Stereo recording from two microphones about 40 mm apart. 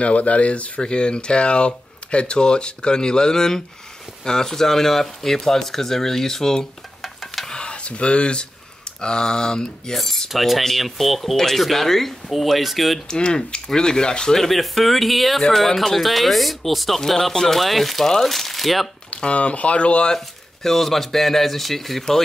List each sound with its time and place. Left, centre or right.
0.0 s speech: left
0.7 s speech: left
7.0 s a sound: centre
7.4 s a sound: left
9.0 s speech: centre
9.9 s cutlery: centre
10.6 s speech: centre
13.1 s speech: left
14.3 s speech: centre
19.0 s speech: left
20.2 s speech: centre